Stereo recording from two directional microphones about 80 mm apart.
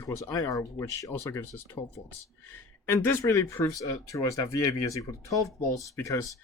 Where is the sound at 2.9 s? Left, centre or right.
Left.